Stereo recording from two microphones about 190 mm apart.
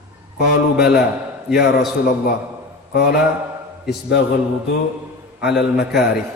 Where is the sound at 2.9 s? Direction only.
60° left (ahead or behind).